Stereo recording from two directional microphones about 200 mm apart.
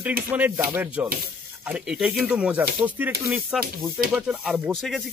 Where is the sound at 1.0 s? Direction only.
50° right (ahead or behind).